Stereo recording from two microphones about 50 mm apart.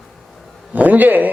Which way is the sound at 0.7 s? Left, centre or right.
Right.